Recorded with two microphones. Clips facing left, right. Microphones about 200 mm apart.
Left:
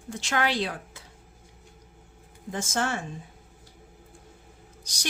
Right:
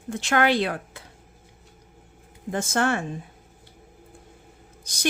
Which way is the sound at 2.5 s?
60° right (ahead or behind).